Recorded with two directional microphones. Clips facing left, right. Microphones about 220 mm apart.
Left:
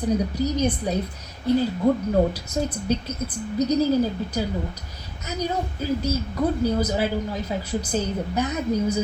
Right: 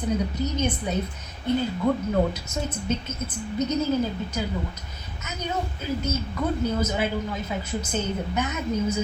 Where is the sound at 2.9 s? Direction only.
35° left (ahead or behind).